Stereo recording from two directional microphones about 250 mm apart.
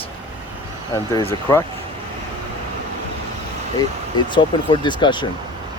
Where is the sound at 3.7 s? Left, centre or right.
Centre.